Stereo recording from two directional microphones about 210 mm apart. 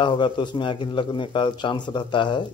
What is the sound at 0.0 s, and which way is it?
A man's voice, 20° left (ahead or behind).